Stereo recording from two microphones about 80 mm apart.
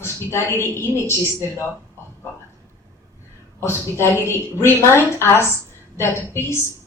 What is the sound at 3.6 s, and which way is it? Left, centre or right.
A woman's voice, left.